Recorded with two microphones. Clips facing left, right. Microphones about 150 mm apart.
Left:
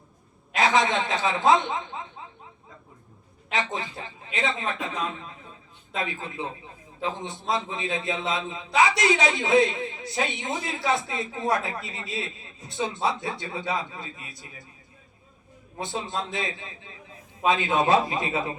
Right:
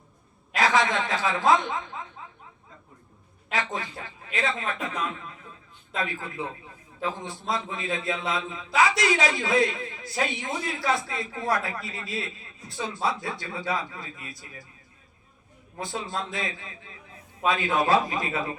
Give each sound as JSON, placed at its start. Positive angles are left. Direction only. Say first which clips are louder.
{"t": 0.5, "sound": "a man's voice", "louder": "left 1 dB", "side_deg": 20}
{"t": 3.5, "sound": "a man's voice", "louder": "left 1 dB", "side_deg": 20}
{"t": 6.0, "sound": "a man's voice", "louder": "even", "side_deg": 20}
{"t": 15.8, "sound": "a man's voice", "louder": "left 1 dB", "side_deg": 20}